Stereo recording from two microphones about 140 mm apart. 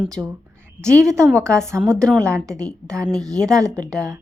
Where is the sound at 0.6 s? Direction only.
20° right (ahead or behind).